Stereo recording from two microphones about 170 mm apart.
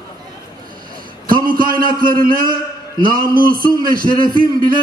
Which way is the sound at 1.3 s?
55° right (ahead or behind).